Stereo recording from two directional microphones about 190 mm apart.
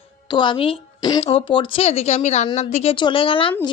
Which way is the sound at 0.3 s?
25° left (ahead or behind).